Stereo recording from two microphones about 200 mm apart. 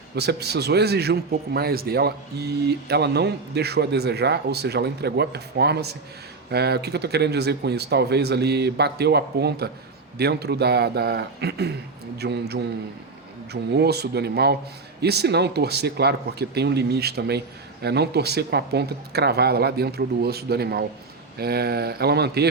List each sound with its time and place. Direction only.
0.2 s a man's voice: 55° right (ahead or behind)